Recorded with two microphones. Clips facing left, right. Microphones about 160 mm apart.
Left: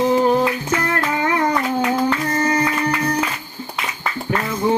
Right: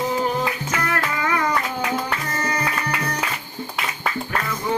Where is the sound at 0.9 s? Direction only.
30° left (ahead or behind).